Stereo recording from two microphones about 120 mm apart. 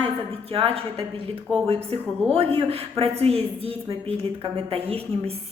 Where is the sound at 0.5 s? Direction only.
50° right (ahead or behind).